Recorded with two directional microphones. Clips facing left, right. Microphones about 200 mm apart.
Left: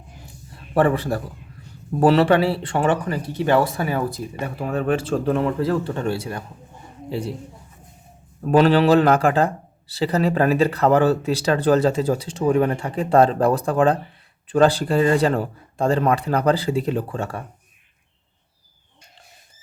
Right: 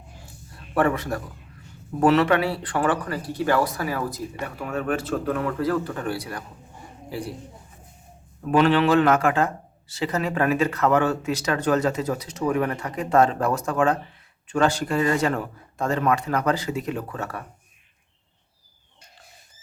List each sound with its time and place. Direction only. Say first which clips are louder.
0.7 s speech: left 4 dB; 30° left (ahead or behind)
8.4 s speech: left 3 dB; 35° left (ahead or behind)